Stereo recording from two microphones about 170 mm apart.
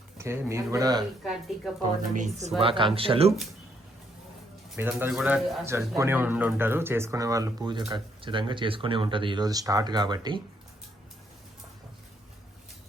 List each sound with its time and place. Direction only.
0.2 s speech: 15° right (ahead or behind)
1.2 s speech: centre (ahead or behind)
2.1 s speech: 45° right (ahead or behind)
2.6 s speech: 30° right (ahead or behind)
4.8 s speech: 10° right (ahead or behind)